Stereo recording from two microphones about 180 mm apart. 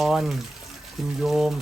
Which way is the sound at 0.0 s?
Centre (ahead or behind).